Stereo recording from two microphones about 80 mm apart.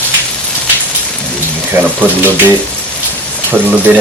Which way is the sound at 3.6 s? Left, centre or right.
Right.